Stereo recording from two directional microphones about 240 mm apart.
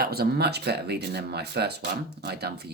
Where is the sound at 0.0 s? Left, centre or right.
Right.